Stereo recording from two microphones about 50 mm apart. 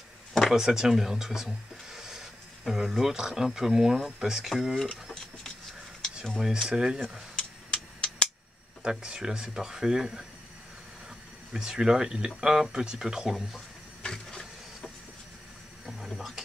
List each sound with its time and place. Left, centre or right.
0.3 s a sound: centre
0.6 s speech: centre
4.7 s a sound: centre
6.4 s speech: centre
7.3 s a sound: centre
8.8 s speech: centre
11.5 s speech: centre
14.0 s printer: centre
16.2 s speech: centre